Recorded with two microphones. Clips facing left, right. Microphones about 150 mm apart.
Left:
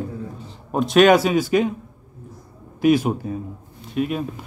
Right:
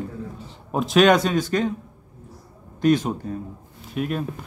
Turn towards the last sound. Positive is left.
turn(degrees=0)  # may be behind; listen again after turning